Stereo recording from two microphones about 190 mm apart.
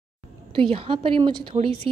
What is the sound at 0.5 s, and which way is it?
A woman's voice, 30° right (ahead or behind).